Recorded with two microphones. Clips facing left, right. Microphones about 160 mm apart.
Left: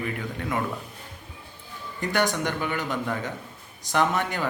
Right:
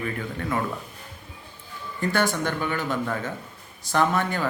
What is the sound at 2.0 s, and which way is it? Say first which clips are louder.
Speech: right 1 dB; 15° left (ahead or behind).